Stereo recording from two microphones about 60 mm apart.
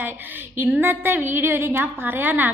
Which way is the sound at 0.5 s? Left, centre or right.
Right.